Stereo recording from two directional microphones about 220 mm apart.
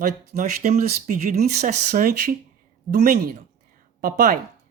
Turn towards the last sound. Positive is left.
turn(degrees=-40)  # may be behind; listen again after turning